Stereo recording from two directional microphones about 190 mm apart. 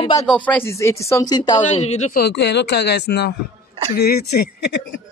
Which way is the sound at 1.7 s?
35° left (ahead or behind).